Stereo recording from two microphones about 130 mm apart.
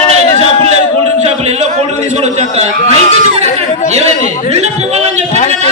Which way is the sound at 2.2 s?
55° right (ahead or behind).